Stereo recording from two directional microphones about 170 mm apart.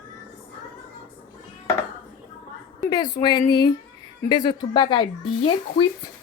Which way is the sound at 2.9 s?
25° left (ahead or behind).